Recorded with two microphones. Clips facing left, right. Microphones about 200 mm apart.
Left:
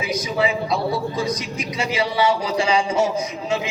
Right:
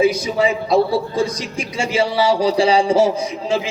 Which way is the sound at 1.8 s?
30° right (ahead or behind).